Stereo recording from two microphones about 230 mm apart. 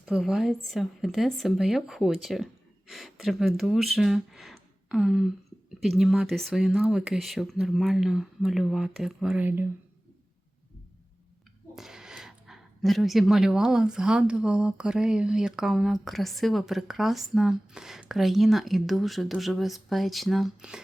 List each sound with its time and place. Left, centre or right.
0.0 s speech: centre
11.7 s speech: centre